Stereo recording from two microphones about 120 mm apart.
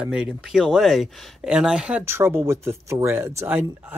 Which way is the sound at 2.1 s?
20° right (ahead or behind).